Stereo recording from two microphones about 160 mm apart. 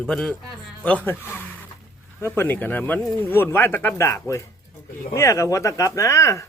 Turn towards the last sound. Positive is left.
turn(degrees=20)  # may be behind; listen again after turning